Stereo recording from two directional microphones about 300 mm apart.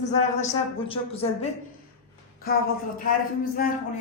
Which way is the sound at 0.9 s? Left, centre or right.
Centre.